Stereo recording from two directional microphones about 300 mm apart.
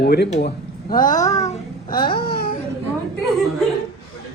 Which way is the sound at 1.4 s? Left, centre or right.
Left.